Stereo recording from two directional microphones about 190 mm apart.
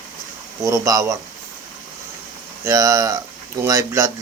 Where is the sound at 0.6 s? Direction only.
15° right (ahead or behind).